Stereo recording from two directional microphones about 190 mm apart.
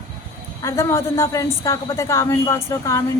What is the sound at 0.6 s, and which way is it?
A woman's voice, 15° left (ahead or behind).